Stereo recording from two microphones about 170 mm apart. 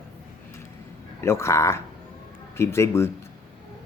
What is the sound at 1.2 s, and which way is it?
Speech, 15° left (ahead or behind).